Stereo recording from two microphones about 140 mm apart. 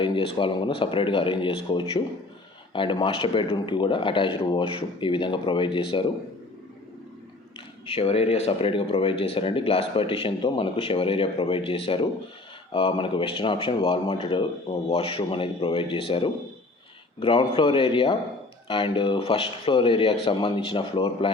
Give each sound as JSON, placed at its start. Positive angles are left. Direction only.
{"t": 0.0, "sound": "speech", "side_deg": 35}
{"t": 7.9, "sound": "speech", "side_deg": 45}